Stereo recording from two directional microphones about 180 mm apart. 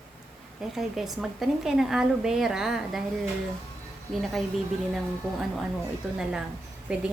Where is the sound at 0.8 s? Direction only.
Centre (ahead or behind).